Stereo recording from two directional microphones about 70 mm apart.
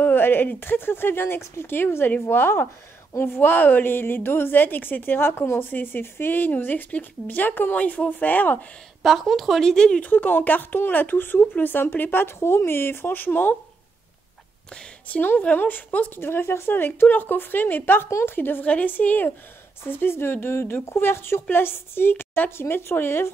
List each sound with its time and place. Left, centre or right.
0.0 s a woman's voice: left
9.0 s speech: centre
10.1 s a woman's voice: left
15.0 s a woman's voice: left
16.3 s a woman's voice: left